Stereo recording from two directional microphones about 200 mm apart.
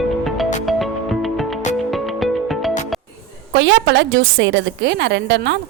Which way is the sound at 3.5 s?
60° right (ahead or behind).